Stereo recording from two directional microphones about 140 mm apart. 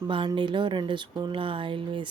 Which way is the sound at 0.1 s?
35° right (ahead or behind).